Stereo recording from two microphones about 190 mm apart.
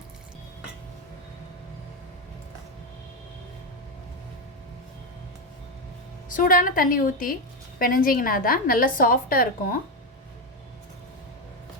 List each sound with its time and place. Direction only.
6.2 s a woman's voice: 50° left (ahead or behind)